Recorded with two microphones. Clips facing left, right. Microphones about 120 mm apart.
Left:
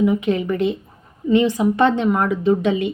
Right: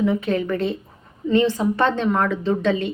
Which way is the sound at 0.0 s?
15° left (ahead or behind).